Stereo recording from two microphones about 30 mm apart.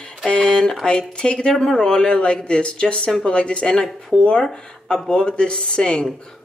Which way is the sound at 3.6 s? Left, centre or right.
Centre.